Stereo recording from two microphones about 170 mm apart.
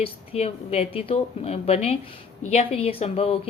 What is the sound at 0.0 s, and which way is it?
Speech, 35° left (ahead or behind).